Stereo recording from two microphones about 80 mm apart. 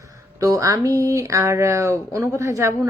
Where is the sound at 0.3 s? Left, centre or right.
Right.